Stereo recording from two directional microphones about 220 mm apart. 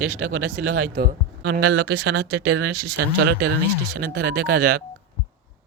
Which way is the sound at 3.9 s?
45° right (ahead or behind).